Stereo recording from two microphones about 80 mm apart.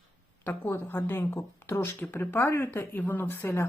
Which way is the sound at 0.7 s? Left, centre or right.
Left.